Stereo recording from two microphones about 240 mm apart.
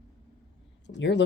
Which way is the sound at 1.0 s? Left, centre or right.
Left.